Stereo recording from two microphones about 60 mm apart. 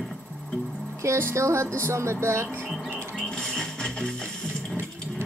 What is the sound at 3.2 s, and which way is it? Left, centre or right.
Music, centre.